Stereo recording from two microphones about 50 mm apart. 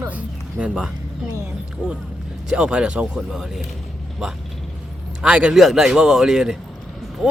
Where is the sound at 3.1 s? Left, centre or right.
Centre.